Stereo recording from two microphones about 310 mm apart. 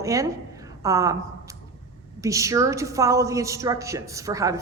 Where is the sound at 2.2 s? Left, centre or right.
Centre.